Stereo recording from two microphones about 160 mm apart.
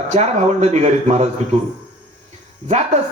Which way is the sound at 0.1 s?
45° right (ahead or behind).